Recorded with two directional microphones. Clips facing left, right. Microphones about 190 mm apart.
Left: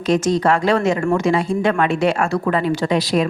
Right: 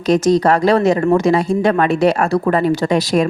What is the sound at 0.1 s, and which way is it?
A woman's voice, 40° right (ahead or behind).